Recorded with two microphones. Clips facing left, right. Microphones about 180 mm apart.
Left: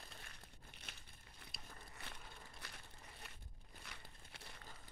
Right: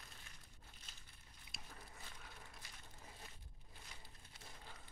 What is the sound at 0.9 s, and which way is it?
Crumpling, 65° left (ahead or behind).